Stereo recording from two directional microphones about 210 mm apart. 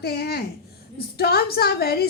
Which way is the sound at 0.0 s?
50° left (ahead or behind).